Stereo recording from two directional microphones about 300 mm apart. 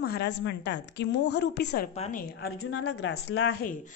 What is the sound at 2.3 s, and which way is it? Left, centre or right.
A woman's voice, left.